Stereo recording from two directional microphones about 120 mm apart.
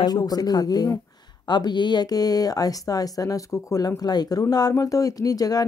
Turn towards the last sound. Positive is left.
turn(degrees=30)  # may be behind; listen again after turning